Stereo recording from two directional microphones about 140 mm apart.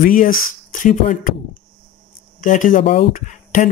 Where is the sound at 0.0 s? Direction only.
85° left.